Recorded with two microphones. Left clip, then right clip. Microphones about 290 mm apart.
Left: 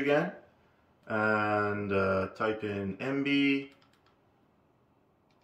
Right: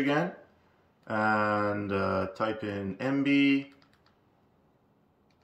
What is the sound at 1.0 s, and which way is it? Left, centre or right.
Speech, centre.